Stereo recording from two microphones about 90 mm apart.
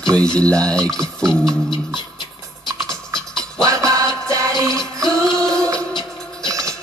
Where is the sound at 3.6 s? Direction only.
40° right (ahead or behind).